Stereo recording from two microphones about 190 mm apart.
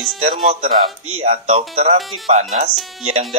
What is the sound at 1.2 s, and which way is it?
Speech, 30° right (ahead or behind).